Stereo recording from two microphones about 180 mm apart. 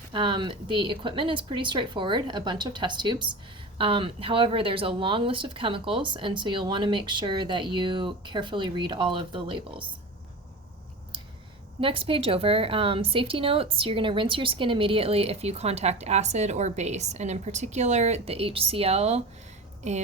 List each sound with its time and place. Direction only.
0.1 s speech: 25° right (ahead or behind)
11.1 s clicking: 25° right (ahead or behind)
11.8 s a woman's voice: 30° right (ahead or behind)